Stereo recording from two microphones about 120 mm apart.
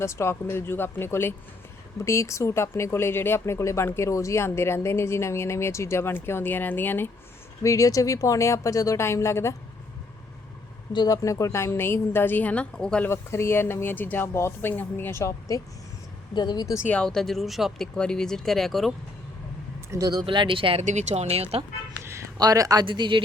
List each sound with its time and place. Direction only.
0.0 s speech: 20° left (ahead or behind)
10.9 s speech: 35° left (ahead or behind); by 13.1 s 5° left (ahead or behind)
13.1 s speech: 20° left (ahead or behind)
16.3 s speech: 35° left (ahead or behind)
16.9 s speech: 5° left (ahead or behind)
19.9 s speech: 30° right (ahead or behind)
20.2 s speech: 45° right (ahead or behind)
20.8 s speech: 75° right (ahead or behind)
21.9 s a sound: 20° right (ahead or behind)
22.4 s speech: 30° right (ahead or behind)
22.9 s speech: 40° right (ahead or behind)